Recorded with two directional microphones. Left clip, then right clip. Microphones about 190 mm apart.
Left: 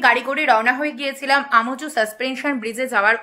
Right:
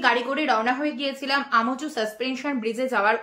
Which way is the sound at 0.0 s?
45° left (ahead or behind).